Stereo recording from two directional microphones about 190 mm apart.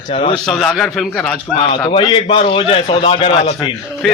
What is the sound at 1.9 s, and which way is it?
A man's voice, 25° left (ahead or behind).